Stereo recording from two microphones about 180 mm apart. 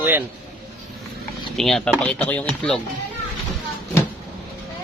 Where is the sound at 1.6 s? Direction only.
5° left (ahead or behind).